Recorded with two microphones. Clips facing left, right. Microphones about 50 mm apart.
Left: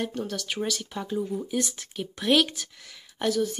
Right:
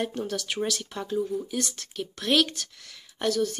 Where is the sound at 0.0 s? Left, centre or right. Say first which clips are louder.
Right 1 dB; centre.